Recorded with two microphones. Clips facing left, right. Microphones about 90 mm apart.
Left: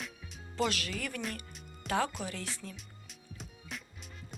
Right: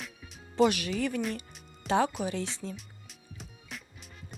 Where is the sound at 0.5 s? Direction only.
20° right (ahead or behind).